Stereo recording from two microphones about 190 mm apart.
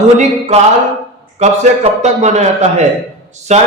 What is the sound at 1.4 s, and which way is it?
Speech, 35° right (ahead or behind).